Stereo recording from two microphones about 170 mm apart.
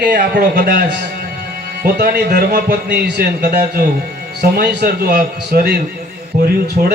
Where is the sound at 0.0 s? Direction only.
75° right (ahead or behind).